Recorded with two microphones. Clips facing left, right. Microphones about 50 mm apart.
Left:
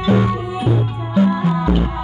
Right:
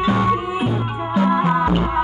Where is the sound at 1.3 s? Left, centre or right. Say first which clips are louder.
Right 2 dB; right.